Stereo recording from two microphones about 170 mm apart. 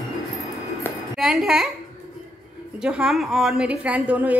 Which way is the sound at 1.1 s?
Centre (ahead or behind).